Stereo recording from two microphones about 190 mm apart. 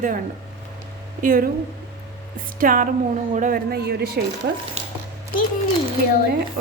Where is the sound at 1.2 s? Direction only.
45° right (ahead or behind).